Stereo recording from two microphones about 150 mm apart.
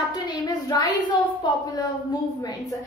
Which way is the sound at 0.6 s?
25° left (ahead or behind).